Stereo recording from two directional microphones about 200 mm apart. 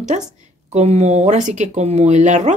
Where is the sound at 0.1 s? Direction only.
35° right (ahead or behind).